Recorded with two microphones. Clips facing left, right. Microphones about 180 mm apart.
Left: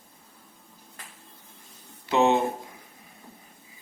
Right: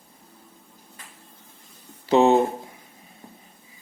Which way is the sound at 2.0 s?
30° right (ahead or behind).